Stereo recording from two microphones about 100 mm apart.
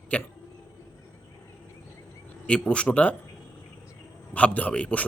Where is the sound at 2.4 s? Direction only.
10° left (ahead or behind).